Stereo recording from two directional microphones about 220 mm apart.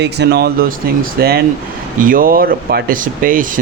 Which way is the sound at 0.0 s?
50° right (ahead or behind).